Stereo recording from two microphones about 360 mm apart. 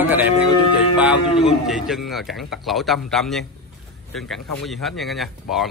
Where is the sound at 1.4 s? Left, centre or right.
Centre.